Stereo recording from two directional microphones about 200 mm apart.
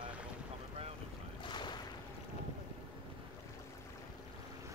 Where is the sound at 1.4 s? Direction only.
20° left (ahead or behind).